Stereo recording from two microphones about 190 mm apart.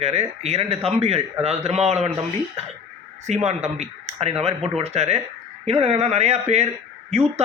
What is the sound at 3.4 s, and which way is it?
A man's voice, 35° right (ahead or behind).